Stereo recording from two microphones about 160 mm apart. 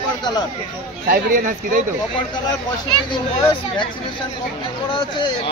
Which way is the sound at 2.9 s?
30° left (ahead or behind).